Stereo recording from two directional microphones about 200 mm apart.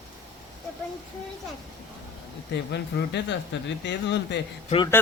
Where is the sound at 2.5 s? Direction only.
55° left (ahead or behind).